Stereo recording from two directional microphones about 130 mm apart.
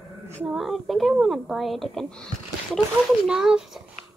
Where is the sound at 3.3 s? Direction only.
5° right (ahead or behind).